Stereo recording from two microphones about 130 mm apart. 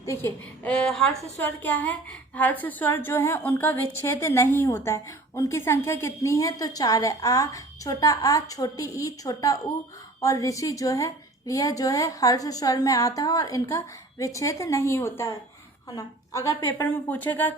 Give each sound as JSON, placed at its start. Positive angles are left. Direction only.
{"t": 0.0, "sound": "a woman's voice", "side_deg": 20}
{"t": 0.7, "sound": "speech", "side_deg": 5}
{"t": 1.4, "sound": "a woman's voice", "side_deg": 15}
{"t": 17.1, "sound": "speech", "side_deg": 15}